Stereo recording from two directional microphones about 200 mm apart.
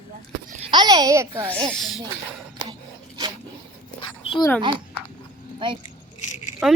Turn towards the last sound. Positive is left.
turn(degrees=-5)  # may be behind; listen again after turning